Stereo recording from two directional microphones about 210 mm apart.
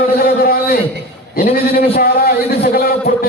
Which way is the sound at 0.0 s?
45° left (ahead or behind).